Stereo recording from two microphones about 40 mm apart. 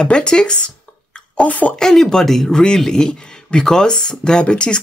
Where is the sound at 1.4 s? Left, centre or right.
Left.